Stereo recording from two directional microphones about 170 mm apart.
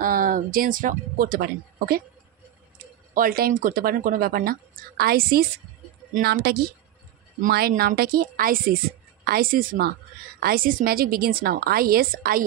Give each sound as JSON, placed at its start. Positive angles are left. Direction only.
{"t": 0.0, "sound": "speech", "side_deg": -55}
{"t": 3.2, "sound": "speech", "side_deg": -60}